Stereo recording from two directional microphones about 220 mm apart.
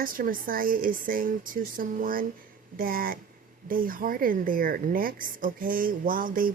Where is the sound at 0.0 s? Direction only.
40° right (ahead or behind).